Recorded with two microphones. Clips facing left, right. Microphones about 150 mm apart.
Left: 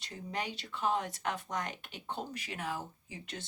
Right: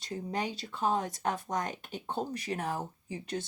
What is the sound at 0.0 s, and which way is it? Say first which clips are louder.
Speech: right 5 dB; 40° right (ahead or behind).